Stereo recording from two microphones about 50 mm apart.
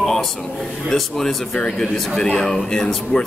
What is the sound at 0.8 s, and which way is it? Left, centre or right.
Speech, centre.